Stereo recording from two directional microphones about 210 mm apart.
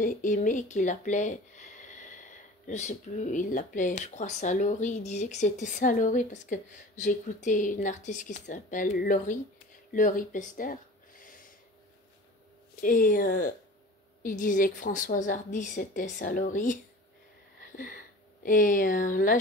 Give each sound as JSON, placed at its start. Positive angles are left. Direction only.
{"t": 0.0, "sound": "speech", "side_deg": 40}
{"t": 12.8, "sound": "speech", "side_deg": 40}
{"t": 17.7, "sound": "speech", "side_deg": 45}